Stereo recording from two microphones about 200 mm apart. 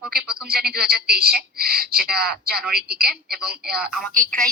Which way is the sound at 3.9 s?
5° left (ahead or behind).